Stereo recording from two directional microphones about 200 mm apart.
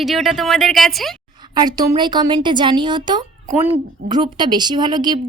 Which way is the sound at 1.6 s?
20° right (ahead or behind).